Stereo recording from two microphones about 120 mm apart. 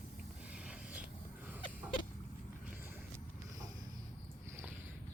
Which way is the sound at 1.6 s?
45° left (ahead or behind).